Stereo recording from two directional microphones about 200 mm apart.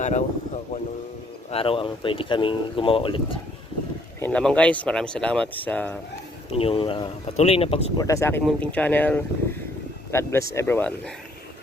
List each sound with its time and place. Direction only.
0.0 s speech: 35° left (ahead or behind)
4.2 s speech: 5° left (ahead or behind)
6.5 s speech: 30° left (ahead or behind)
8.0 s speech: 15° left (ahead or behind)